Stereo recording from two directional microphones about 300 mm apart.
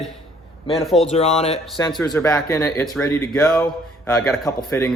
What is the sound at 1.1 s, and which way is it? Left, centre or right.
Speech, left.